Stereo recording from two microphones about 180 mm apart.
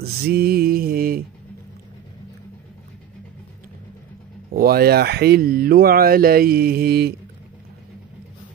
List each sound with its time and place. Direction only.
0.0 s mantra: 60° right (ahead or behind)
4.6 s speech: 60° right (ahead or behind)